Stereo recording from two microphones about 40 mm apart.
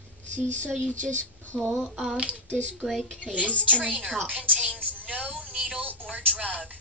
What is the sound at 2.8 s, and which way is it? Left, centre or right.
Speech, centre.